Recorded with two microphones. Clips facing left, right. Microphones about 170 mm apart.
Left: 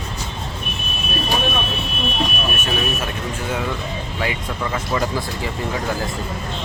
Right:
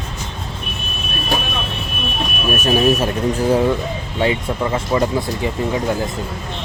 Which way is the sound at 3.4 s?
35° right (ahead or behind).